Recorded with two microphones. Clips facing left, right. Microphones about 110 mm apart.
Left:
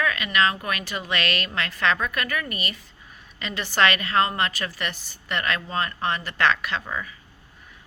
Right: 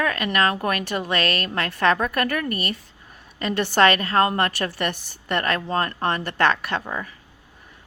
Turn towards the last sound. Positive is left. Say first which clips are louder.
# right 2 dB
turn(degrees=-45)  # may be behind; listen again after turning